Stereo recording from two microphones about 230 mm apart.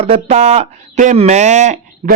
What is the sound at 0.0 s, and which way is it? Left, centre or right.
Speech, right.